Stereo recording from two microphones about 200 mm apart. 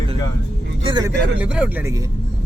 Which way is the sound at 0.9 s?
20° right (ahead or behind).